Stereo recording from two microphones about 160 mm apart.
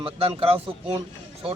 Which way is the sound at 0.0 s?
35° right (ahead or behind).